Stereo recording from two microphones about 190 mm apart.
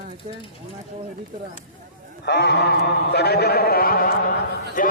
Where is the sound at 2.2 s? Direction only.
60° left (ahead or behind).